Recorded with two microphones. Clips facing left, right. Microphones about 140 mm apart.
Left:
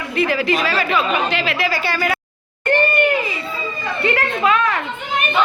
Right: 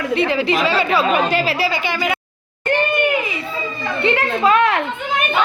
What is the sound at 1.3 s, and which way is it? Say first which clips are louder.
Speech: right 2 dB; 40° right (ahead or behind).